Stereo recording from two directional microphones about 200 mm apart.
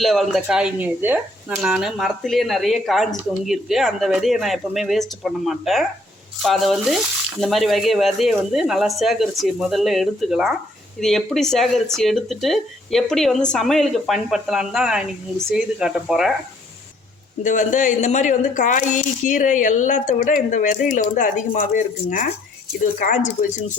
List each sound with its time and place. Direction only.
0.0 s speech: centre (ahead or behind)
17.4 s a woman's voice: 40° left (ahead or behind)